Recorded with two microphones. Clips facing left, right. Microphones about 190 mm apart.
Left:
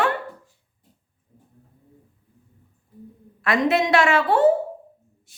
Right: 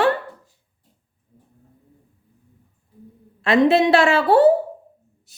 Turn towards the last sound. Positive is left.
turn(degrees=-40)  # may be behind; listen again after turning